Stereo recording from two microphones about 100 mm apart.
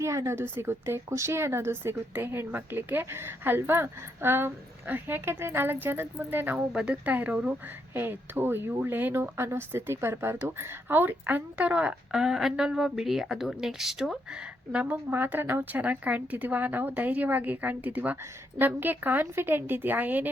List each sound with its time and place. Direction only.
0.0 s a woman's voice: 30° right (ahead or behind)